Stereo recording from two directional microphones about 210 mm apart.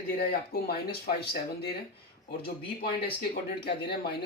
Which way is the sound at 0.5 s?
50° left (ahead or behind).